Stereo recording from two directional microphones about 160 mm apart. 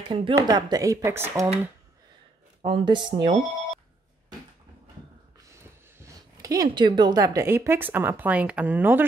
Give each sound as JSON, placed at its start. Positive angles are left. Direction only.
{"t": 0.1, "sound": "speech", "side_deg": -25}
{"t": 2.6, "sound": "speech", "side_deg": -35}
{"t": 5.6, "sound": "a woman's voice", "side_deg": -15}